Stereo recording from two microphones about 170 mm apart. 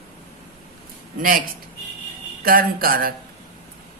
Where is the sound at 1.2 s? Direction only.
55° right (ahead or behind).